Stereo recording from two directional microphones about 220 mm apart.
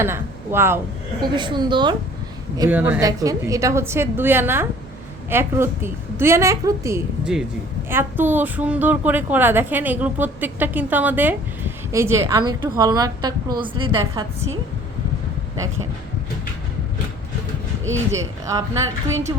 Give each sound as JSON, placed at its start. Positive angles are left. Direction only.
{"t": 0.0, "sound": "a woman's voice", "side_deg": -10}
{"t": 2.6, "sound": "a woman's voice", "side_deg": -10}
{"t": 18.1, "sound": "a woman's voice", "side_deg": -15}